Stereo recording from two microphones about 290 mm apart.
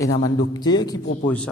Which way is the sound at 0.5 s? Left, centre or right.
Centre.